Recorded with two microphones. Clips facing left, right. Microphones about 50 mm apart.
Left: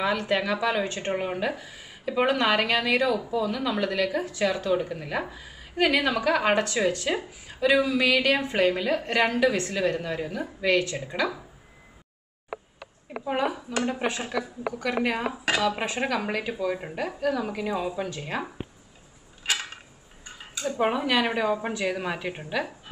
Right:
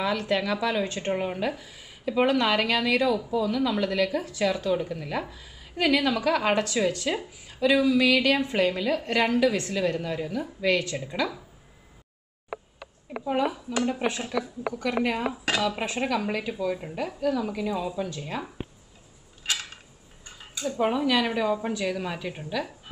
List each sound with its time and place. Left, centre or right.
0.0 s a woman's voice: centre
13.2 s speech: centre
14.8 s a woman's voice: centre; by 18.5 s left
19.4 s a sound: left
20.6 s speech: left